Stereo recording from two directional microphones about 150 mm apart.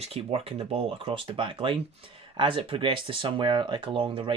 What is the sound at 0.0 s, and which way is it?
Speech, 40° right (ahead or behind).